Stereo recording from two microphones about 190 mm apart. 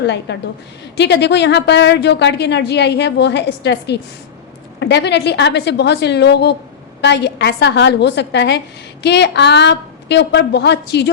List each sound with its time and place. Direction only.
0.3 s a woman's voice: 65° left (ahead or behind)